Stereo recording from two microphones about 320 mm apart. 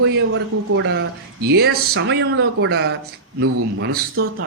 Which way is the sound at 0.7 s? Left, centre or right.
Right.